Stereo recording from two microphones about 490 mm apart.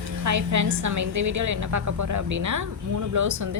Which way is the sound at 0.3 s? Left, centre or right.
Right.